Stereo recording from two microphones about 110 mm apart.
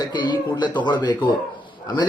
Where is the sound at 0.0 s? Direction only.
45° left (ahead or behind).